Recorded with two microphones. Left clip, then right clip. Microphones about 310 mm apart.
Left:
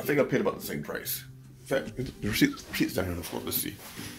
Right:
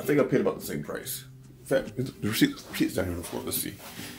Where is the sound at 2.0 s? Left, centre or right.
Right.